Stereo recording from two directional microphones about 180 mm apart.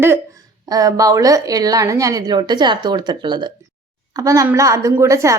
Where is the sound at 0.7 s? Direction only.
20° right (ahead or behind).